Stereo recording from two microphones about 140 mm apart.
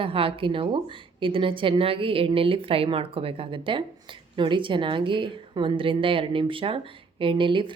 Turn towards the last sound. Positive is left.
turn(degrees=-35)  # may be behind; listen again after turning